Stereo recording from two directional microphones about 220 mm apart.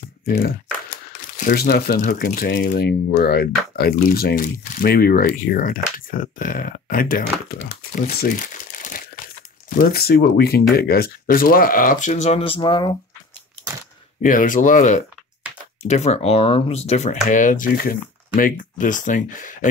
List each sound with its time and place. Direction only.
1.3 s speech: 40° left (ahead or behind); by 12.9 s 20° left (ahead or behind)
14.2 s speech: 35° left (ahead or behind)